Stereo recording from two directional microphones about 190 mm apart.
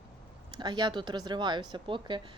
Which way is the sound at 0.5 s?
20° right (ahead or behind).